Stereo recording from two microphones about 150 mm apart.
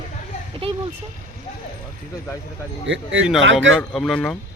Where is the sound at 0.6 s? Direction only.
40° right (ahead or behind).